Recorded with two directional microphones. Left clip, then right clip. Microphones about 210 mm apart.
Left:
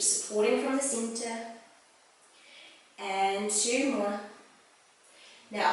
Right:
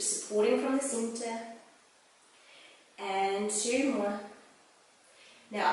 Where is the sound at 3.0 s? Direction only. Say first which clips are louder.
Left 2 dB; 10° right (ahead or behind).